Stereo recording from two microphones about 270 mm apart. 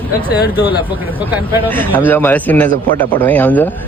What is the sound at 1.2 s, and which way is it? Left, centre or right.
Speech, centre.